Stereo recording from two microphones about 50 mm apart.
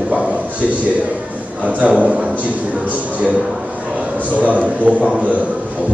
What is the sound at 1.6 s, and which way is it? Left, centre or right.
Speech, right.